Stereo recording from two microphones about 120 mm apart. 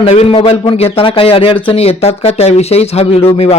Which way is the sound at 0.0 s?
55° left (ahead or behind).